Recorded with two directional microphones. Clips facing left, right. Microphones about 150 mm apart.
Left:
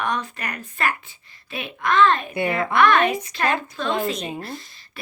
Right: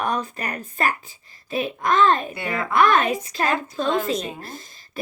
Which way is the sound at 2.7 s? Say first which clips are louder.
Even; 40° right (ahead or behind).